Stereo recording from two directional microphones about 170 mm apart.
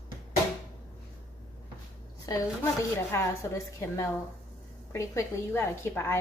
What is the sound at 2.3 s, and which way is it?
A woman's voice, 20° left (ahead or behind).